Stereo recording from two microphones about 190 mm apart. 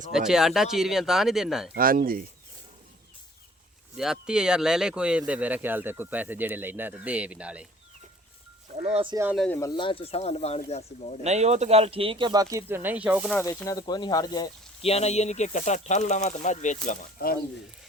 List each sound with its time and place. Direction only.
0.1 s speech: centre (ahead or behind)
1.7 s speech: 50° right (ahead or behind)
3.9 s speech: 5° right (ahead or behind)
8.8 s speech: 30° right (ahead or behind)
9.3 s speech: centre (ahead or behind)
9.6 s speech: 20° left (ahead or behind)
11.2 s speech: 35° right (ahead or behind); by 13.3 s 5° right (ahead or behind)
13.4 s speech: 15° left (ahead or behind)
14.8 s speech: 35° left (ahead or behind)